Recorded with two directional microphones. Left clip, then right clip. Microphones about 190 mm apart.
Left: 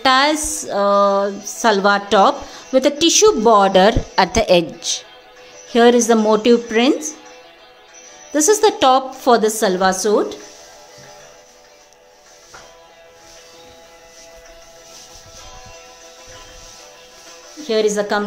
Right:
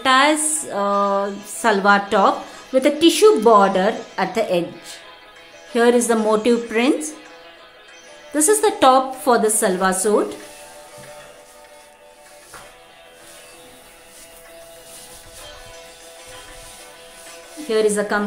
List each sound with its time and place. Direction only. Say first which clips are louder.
0.0 s speech: left 1 dB; 30° left (ahead or behind)
5.7 s a woman's voice: left 4 dB; 30° left (ahead or behind)
8.3 s a woman's voice: left 3 dB; 25° left (ahead or behind)
17.6 s a woman's voice: left 1 dB; 20° left (ahead or behind)